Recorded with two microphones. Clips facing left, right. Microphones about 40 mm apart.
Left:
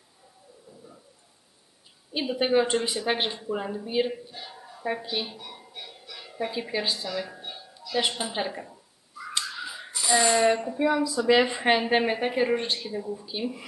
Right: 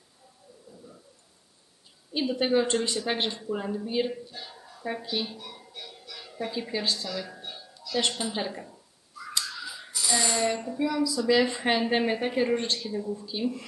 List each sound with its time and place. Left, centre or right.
2.1 s a woman's voice: centre
9.3 s a sound: left
10.8 s a woman's voice: left